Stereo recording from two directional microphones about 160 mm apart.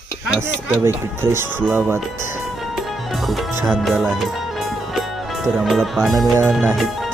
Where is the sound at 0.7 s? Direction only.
15° right (ahead or behind).